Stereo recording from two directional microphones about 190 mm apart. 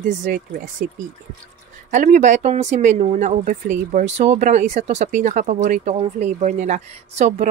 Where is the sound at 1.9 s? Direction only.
40° right (ahead or behind).